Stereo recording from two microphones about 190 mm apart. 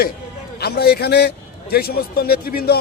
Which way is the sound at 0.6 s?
55° left (ahead or behind).